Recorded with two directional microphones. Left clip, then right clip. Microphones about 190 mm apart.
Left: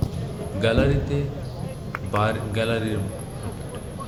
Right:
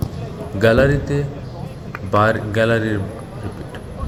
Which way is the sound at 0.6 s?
30° right (ahead or behind).